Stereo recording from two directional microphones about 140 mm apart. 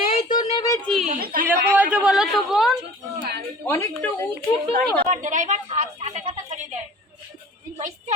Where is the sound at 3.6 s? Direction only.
20° left (ahead or behind).